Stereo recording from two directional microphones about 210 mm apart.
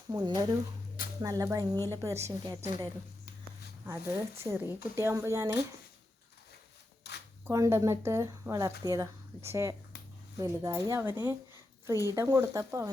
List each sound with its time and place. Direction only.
0.1 s speech: 20° right (ahead or behind)
7.1 s a sound: 55° left (ahead or behind)
7.4 s speech: 15° right (ahead or behind)